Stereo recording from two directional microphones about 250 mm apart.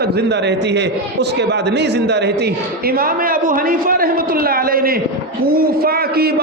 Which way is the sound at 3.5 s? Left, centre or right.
Right.